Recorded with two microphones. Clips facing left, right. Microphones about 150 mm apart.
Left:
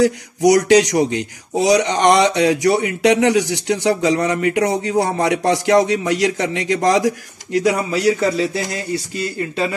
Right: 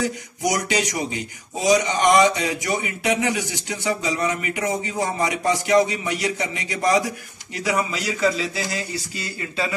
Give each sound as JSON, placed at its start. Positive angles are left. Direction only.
{"t": 0.0, "sound": "speech", "side_deg": 75}
{"t": 8.4, "sound": "speech", "side_deg": 60}